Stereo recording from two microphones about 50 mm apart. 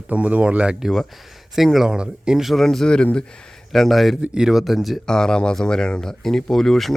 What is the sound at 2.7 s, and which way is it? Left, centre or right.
Speech, centre.